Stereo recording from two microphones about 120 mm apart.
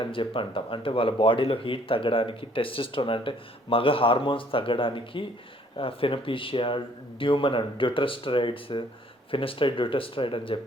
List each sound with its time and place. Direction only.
0.0 s speech: 45° left (ahead or behind)